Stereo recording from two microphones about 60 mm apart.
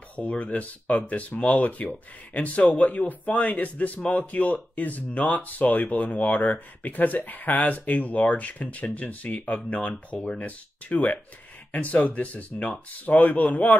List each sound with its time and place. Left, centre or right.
0.1 s a man's voice: left